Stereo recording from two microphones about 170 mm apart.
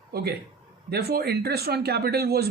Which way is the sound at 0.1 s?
65° right (ahead or behind).